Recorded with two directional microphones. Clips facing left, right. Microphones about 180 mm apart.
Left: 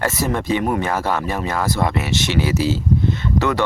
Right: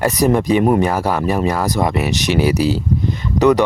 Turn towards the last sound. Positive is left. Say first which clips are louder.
# right 6 dB
turn(degrees=-15)  # may be behind; listen again after turning